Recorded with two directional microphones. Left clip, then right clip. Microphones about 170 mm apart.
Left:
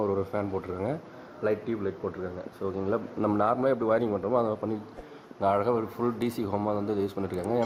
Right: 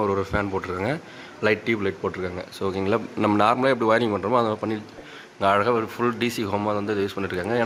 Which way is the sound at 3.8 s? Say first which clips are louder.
Right 7 dB; 5° right (ahead or behind).